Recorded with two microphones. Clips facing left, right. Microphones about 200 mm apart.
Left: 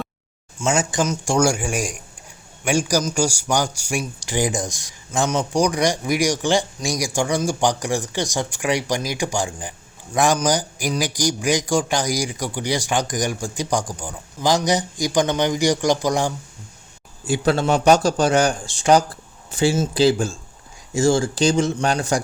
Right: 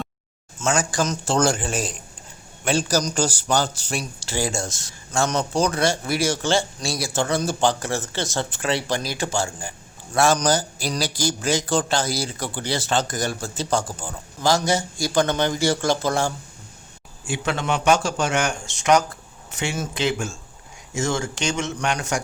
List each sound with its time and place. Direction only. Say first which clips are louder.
0.6 s speech: left 2 dB; 20° left (ahead or behind)
17.2 s speech: left 6 dB; 35° left (ahead or behind)